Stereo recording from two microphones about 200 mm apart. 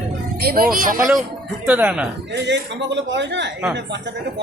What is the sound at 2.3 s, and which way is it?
A man's voice, 60° right (ahead or behind).